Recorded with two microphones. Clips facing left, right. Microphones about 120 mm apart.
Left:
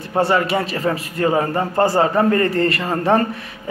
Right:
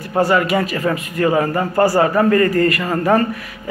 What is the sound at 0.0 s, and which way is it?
A man's voice, 25° left (ahead or behind).